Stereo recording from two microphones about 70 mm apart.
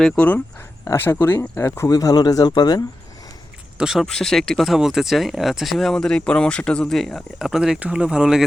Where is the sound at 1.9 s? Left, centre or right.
Left.